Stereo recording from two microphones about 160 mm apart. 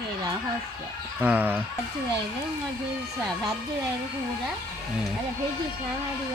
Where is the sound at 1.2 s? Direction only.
10° right (ahead or behind).